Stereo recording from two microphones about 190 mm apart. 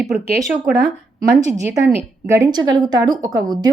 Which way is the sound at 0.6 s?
60° right (ahead or behind).